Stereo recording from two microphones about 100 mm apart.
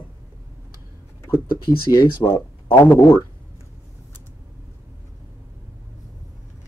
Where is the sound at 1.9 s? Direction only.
35° left (ahead or behind).